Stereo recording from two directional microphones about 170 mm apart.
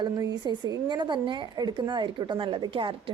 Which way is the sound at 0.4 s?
25° right (ahead or behind).